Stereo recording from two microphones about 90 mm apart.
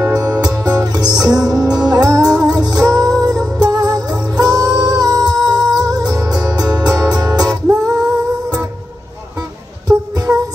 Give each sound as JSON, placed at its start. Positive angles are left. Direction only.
{"t": 0.0, "sound": "music", "side_deg": -40}
{"t": 9.8, "sound": "music", "side_deg": -40}